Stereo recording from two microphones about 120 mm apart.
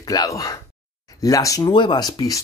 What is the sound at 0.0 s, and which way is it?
Speech, 30° left (ahead or behind).